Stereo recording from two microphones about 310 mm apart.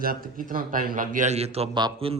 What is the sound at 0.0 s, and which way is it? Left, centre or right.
Mantra, right.